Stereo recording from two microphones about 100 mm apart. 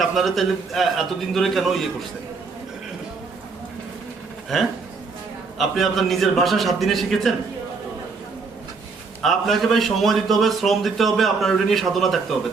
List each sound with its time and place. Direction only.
0.0 s a man's voice: centre (ahead or behind)
5.5 s a man's voice: centre (ahead or behind)
9.2 s a man's voice: centre (ahead or behind)